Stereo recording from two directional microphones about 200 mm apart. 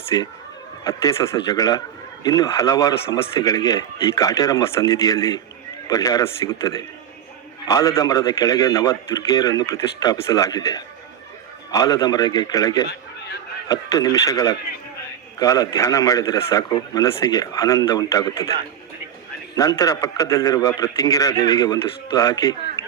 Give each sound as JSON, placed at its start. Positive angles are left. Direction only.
{"t": 0.1, "sound": "a man's voice", "side_deg": 20}
{"t": 19.5, "sound": "a man's voice", "side_deg": 20}